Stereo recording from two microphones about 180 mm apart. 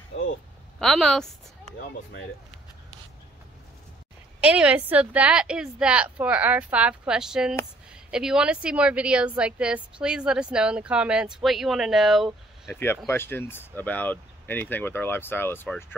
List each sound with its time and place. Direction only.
0.7 s speech: centre (ahead or behind)
4.4 s a woman's voice: 5° right (ahead or behind)
12.6 s speech: 10° left (ahead or behind)